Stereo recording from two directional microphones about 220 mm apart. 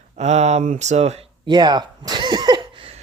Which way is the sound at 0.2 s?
30° right (ahead or behind).